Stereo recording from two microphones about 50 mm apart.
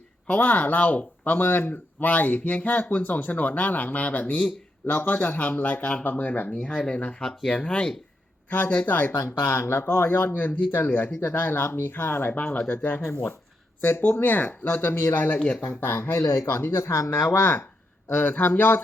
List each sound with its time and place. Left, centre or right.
0.3 s speech: left
6.7 s speech: left
7.2 s speech: centre
7.5 s speech: left
8.4 s speech: left
13.1 s speech: left
14.0 s speech: left
15.1 s speech: left
16.7 s speech: left
17.4 s speech: left